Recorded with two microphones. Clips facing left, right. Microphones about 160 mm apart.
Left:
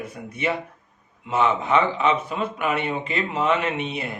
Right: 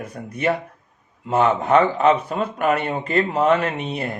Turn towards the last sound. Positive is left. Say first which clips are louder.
# right 2 dB
turn(degrees=-40)  # may be behind; listen again after turning